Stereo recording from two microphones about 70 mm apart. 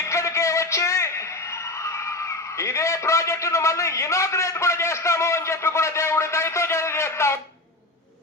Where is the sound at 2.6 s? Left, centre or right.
Left.